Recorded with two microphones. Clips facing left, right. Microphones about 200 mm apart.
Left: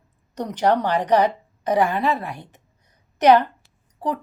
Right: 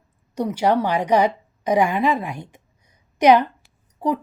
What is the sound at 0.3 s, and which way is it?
A woman's voice, 10° right (ahead or behind).